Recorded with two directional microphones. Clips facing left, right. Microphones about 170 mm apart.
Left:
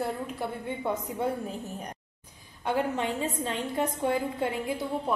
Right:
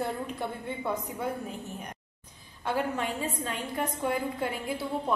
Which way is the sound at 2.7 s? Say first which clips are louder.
Left 2 dB; 20° left (ahead or behind).